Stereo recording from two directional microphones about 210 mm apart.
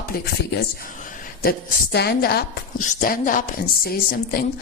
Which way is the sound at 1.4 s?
50° left (ahead or behind).